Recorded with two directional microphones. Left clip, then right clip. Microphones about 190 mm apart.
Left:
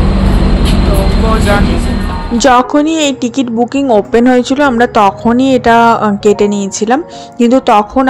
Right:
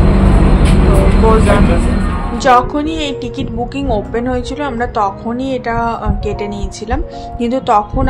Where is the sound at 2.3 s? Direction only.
45° left (ahead or behind).